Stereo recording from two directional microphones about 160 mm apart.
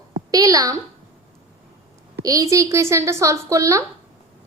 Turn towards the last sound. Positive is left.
turn(degrees=-20)  # may be behind; listen again after turning